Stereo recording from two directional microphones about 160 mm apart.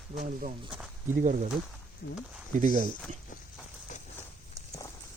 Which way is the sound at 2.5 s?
55° right (ahead or behind).